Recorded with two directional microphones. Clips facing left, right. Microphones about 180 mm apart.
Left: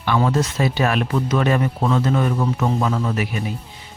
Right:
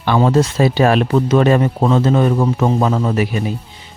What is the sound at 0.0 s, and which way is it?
Speech, 30° right (ahead or behind).